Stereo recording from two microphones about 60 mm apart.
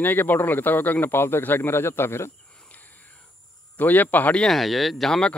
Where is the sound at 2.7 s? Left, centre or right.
Left.